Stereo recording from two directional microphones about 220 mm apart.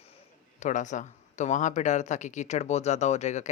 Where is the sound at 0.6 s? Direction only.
35° left (ahead or behind).